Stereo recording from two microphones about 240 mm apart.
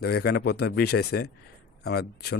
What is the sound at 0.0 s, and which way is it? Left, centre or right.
Speech, left.